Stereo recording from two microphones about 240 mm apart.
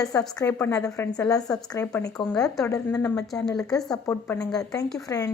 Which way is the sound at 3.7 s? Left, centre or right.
Centre.